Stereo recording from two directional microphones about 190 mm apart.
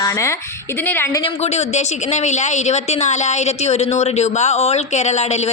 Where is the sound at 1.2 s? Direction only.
35° left (ahead or behind).